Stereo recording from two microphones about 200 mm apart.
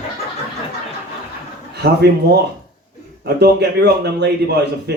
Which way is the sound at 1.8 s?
55° right (ahead or behind).